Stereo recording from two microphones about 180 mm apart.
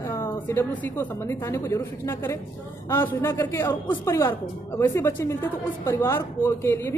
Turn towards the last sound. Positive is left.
turn(degrees=15)  # may be behind; listen again after turning